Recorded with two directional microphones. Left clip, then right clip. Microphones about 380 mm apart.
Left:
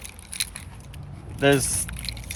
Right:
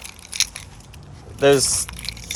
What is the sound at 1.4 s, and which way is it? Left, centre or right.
Pour, centre.